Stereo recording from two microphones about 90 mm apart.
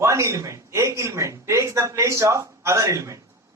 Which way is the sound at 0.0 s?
35° right (ahead or behind).